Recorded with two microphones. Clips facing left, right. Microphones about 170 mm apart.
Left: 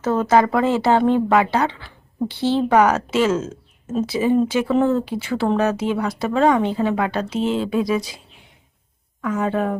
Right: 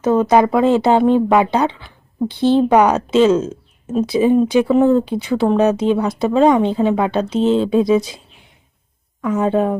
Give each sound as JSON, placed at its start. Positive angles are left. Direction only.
{"t": 0.0, "sound": "speech", "side_deg": -15}
{"t": 9.2, "sound": "speech", "side_deg": -20}